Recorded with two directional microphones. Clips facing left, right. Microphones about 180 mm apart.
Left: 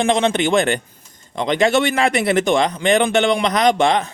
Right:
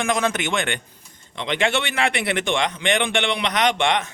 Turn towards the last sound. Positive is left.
turn(degrees=35)  # may be behind; listen again after turning